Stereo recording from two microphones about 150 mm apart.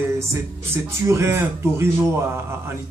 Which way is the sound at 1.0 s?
20° right (ahead or behind).